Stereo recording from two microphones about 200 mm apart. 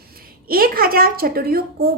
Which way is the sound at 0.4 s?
45° right (ahead or behind).